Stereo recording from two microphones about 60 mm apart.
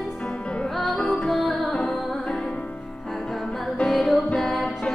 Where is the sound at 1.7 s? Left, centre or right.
Centre.